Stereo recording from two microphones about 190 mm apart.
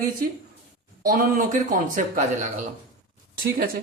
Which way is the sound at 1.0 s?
45° right (ahead or behind).